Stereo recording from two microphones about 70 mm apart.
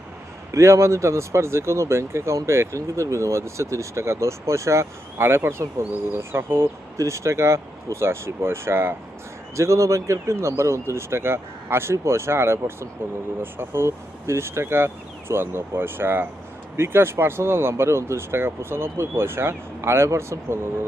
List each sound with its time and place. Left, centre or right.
0.5 s speech: right
9.6 s speech: right